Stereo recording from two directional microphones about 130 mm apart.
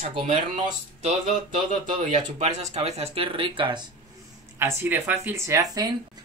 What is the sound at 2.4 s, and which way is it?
Speech, 55° right (ahead or behind).